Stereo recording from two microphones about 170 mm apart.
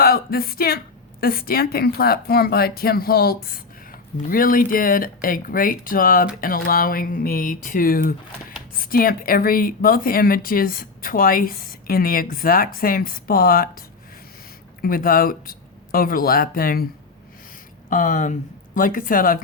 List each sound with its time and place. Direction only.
0.0 s speech: 65° left (ahead or behind)
14.8 s speech: 60° left (ahead or behind)
17.8 s speech: 50° left (ahead or behind)